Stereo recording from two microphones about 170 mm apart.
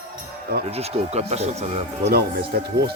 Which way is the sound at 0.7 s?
40° right (ahead or behind).